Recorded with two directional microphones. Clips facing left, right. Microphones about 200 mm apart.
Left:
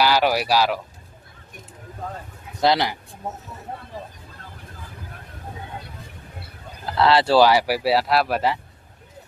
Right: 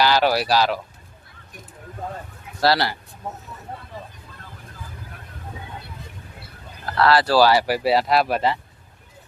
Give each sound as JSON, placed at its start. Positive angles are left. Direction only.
{"t": 0.0, "sound": "speech", "side_deg": 10}
{"t": 2.6, "sound": "speech", "side_deg": 20}
{"t": 7.0, "sound": "speech", "side_deg": 25}